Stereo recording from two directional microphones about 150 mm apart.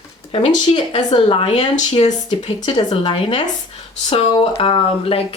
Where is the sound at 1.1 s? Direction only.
35° left (ahead or behind).